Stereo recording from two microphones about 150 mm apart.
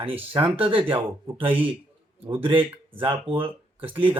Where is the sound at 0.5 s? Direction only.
35° right (ahead or behind).